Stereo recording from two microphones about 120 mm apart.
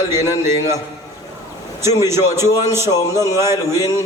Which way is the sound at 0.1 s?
25° right (ahead or behind).